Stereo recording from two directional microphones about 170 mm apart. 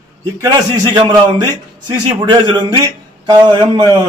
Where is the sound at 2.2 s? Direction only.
25° right (ahead or behind).